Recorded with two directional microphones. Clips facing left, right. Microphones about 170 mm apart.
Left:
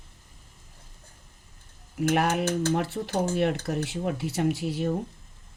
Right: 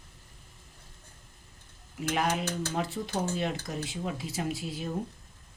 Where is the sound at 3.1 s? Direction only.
65° left (ahead or behind).